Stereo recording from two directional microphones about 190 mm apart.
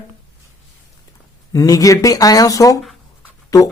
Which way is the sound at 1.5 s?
20° left (ahead or behind).